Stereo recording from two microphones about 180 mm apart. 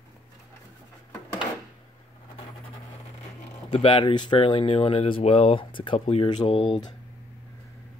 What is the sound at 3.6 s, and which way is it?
Speech, 30° left (ahead or behind).